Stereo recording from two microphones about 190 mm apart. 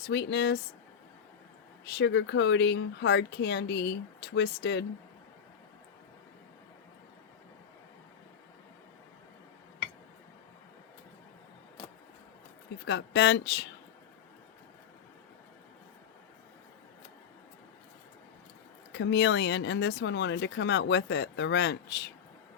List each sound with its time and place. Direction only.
0.1 s speech: 65° left (ahead or behind)
1.8 s speech: 65° left (ahead or behind)
12.8 s speech: 65° left (ahead or behind)
18.9 s speech: 70° left (ahead or behind)